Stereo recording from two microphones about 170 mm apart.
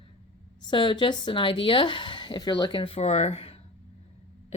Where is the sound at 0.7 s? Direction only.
30° left (ahead or behind).